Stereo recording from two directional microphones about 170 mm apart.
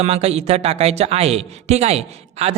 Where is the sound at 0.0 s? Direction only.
35° right (ahead or behind).